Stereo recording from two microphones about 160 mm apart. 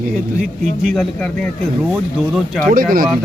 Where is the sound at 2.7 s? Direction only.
60° right (ahead or behind).